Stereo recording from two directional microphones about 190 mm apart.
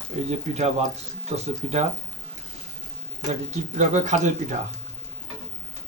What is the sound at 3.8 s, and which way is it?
Speech, 40° right (ahead or behind).